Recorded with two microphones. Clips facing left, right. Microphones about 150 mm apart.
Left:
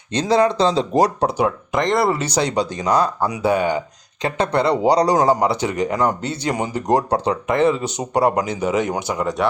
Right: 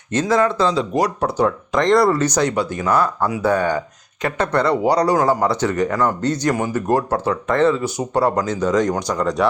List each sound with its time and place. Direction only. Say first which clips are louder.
0.1 s speech: left 1 dB; 20° left (ahead or behind); by 2.0 s 5° left (ahead or behind)
2.5 s speech: even; 20° left (ahead or behind); by 9.5 s centre (ahead or behind)